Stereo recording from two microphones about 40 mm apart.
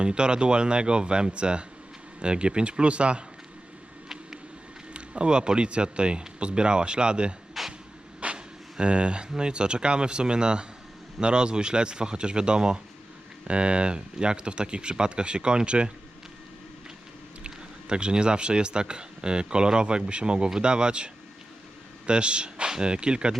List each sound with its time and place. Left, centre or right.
0.0 s speech: right
4.9 s speech: right
7.6 s vehicle: centre
8.2 s a sound: right
8.8 s speech: right
17.4 s speech: right